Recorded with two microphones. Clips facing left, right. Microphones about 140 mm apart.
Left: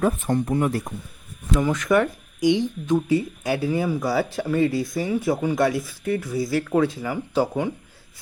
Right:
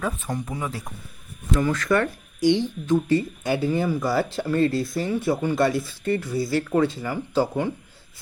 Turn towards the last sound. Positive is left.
turn(degrees=10)  # may be behind; listen again after turning